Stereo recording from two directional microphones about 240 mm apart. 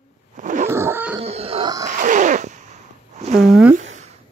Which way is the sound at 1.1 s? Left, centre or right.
Right.